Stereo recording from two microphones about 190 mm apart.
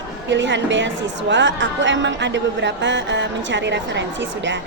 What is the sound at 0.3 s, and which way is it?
A woman's voice, 70° right (ahead or behind).